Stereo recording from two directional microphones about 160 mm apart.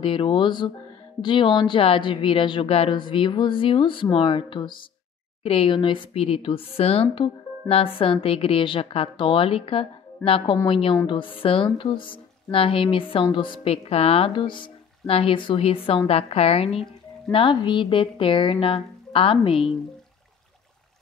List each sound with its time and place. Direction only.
0.0 s speech: 35° left (ahead or behind)